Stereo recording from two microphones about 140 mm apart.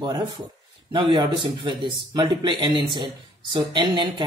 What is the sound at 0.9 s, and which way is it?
Speech, 35° right (ahead or behind).